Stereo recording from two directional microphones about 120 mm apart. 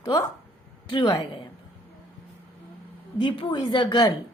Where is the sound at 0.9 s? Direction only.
40° left (ahead or behind).